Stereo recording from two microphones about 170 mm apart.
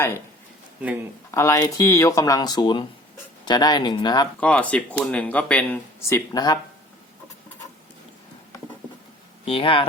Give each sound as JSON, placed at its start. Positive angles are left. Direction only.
{"t": 1.3, "sound": "speech", "side_deg": 20}
{"t": 4.4, "sound": "speech", "side_deg": 5}
{"t": 9.5, "sound": "speech", "side_deg": 30}